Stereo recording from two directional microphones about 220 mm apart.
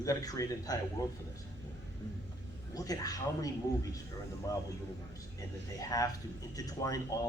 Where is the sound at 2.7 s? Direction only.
15° left (ahead or behind).